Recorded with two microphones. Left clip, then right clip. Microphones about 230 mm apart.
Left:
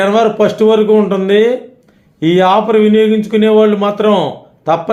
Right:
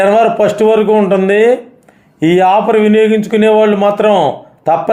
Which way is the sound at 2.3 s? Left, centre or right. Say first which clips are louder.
Right 1 dB; centre.